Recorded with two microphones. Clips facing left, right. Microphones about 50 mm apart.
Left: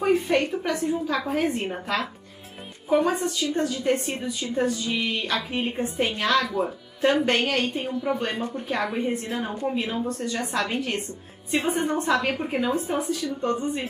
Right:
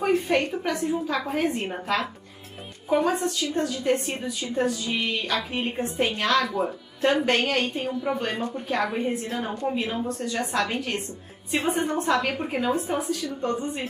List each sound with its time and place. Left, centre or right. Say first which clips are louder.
0.0 s a woman's voice: left 1 dB; centre
3.1 s a woman's voice: even; centre